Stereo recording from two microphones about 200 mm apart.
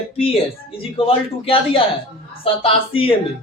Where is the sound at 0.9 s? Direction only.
30° left (ahead or behind).